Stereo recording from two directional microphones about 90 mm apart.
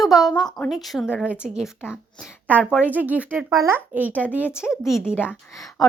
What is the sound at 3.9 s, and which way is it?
Speech, 20° right (ahead or behind).